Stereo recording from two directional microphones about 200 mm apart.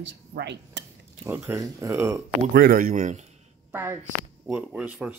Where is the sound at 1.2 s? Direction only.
10° right (ahead or behind).